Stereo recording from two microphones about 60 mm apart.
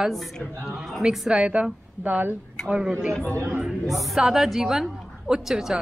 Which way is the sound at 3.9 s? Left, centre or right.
Centre.